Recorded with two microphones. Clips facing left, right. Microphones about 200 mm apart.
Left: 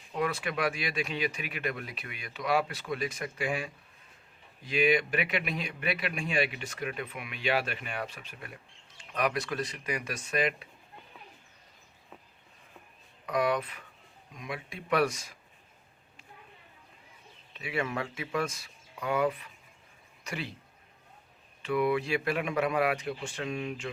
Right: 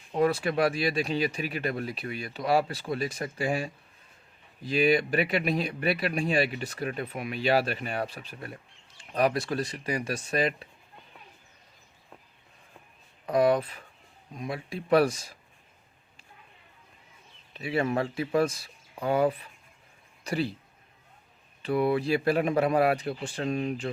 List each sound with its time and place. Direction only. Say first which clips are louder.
0.1 s speech: right 7 dB; 35° right (ahead or behind)
13.2 s speech: right 6 dB; 35° right (ahead or behind)
17.5 s speech: right 6 dB; 35° right (ahead or behind)
21.6 s speech: right 2 dB; 35° right (ahead or behind)